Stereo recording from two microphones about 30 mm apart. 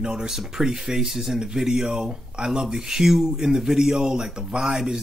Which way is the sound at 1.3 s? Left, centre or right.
Right.